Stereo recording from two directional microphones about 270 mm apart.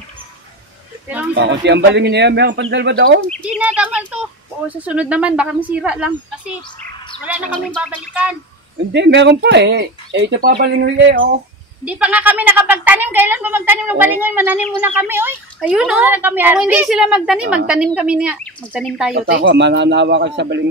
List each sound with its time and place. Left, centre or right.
1.3 s speech: right
3.4 s speech: centre
7.5 s speech: centre
8.9 s speech: right
11.8 s a woman's voice: centre
19.1 s speech: right